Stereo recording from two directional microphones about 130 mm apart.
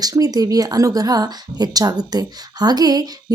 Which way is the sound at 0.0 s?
30° right (ahead or behind).